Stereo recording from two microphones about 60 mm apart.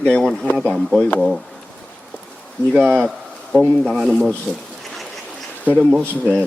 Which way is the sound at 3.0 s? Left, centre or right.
Centre.